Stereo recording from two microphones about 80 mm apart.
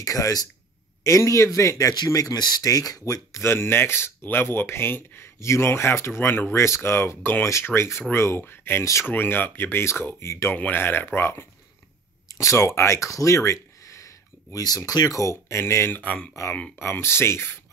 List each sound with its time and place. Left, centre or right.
0.0 s speech: left
3.1 s speech: left
12.3 s speech: left
16.0 s speech: centre